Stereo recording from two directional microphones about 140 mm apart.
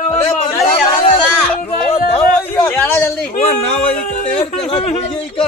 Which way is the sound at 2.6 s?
15° left (ahead or behind).